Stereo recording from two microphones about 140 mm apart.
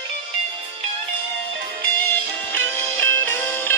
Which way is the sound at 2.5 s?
15° left (ahead or behind).